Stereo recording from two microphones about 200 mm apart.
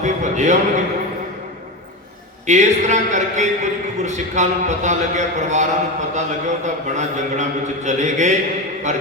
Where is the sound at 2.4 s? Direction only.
35° right (ahead or behind).